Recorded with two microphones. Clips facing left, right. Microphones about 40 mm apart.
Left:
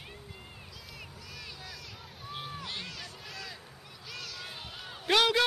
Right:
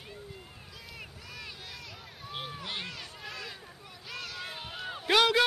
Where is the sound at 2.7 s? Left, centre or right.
Centre.